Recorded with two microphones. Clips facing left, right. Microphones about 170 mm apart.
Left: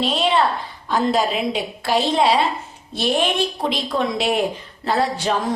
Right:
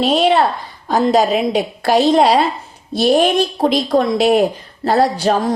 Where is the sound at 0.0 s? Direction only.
45° right (ahead or behind).